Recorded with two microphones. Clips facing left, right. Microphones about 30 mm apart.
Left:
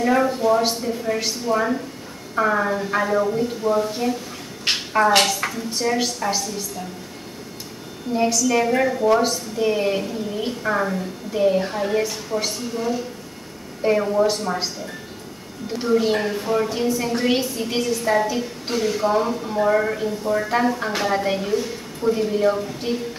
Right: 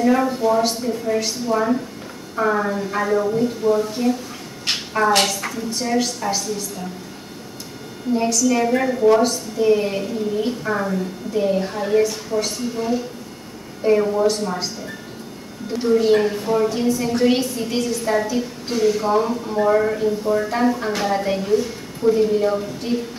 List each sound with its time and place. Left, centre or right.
0.0 s a woman's voice: centre
8.1 s a woman's voice: centre
15.7 s a woman's voice: centre